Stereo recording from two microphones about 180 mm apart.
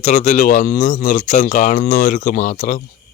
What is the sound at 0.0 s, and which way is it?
Speech, 40° left (ahead or behind).